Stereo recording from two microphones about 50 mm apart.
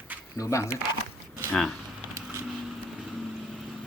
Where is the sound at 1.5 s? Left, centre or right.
Centre.